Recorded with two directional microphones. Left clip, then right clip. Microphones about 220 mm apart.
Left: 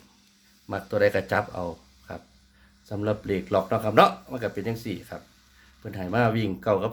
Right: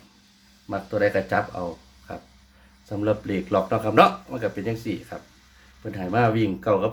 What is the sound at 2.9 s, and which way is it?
Speech, 30° left (ahead or behind).